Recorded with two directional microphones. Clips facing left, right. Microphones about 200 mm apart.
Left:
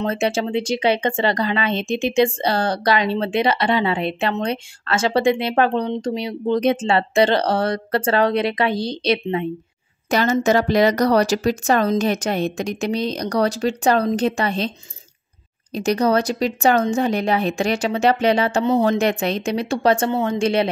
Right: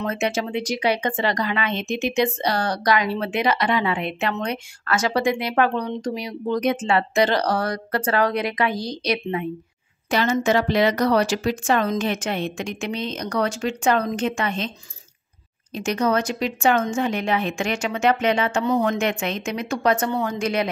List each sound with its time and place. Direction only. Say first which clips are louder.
0.0 s speech: left 3 dB; 30° left (ahead or behind)
10.0 s a woman's voice: left 3 dB; 40° left (ahead or behind)
15.7 s a woman's voice: left 4 dB; 35° left (ahead or behind)